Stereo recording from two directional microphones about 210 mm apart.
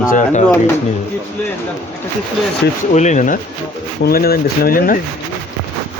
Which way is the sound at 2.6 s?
50° left (ahead or behind).